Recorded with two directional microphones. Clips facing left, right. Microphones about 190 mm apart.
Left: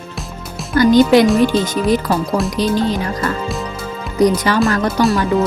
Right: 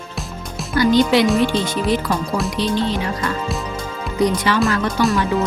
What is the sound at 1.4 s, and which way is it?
Speech, 40° left (ahead or behind).